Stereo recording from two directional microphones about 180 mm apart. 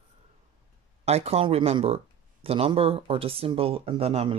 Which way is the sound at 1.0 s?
35° right (ahead or behind).